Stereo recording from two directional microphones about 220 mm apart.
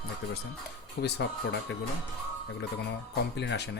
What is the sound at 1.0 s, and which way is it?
Speech, 50° left (ahead or behind).